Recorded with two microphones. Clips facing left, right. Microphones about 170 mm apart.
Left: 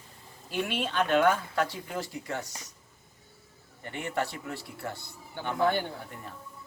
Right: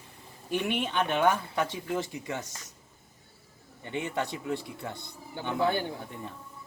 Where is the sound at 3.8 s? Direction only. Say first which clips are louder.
Even; 20° right (ahead or behind).